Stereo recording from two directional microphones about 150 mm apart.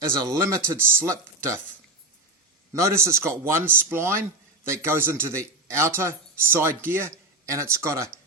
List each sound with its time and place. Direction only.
0.2 s speech: 20° right (ahead or behind)
2.7 s speech: 20° right (ahead or behind)